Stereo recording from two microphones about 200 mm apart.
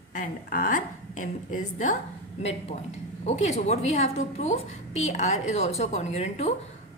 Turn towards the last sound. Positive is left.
turn(degrees=30)  # may be behind; listen again after turning